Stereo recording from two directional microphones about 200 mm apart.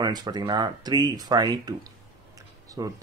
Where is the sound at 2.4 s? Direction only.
15° right (ahead or behind).